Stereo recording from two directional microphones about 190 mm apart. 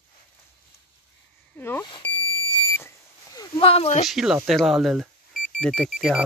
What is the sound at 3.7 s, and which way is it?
Speech, 35° left (ahead or behind).